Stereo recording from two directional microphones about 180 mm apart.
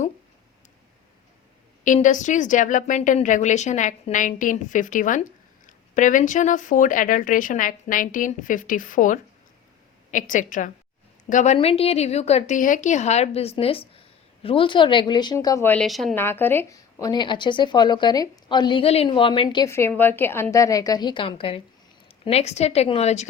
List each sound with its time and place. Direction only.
1.8 s speech: 45° left (ahead or behind)
11.5 s a woman's voice: 35° left (ahead or behind); by 16.1 s centre (ahead or behind)
16.1 s a woman's voice: 10° left (ahead or behind); by 19.6 s 30° left (ahead or behind)
19.6 s a woman's voice: 15° left (ahead or behind); by 23.3 s 40° left (ahead or behind)